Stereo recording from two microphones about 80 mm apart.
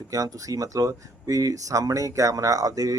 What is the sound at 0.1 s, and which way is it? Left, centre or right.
Speech, right.